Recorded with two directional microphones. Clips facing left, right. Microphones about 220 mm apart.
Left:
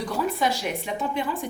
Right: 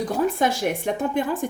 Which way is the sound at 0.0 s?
50° right (ahead or behind).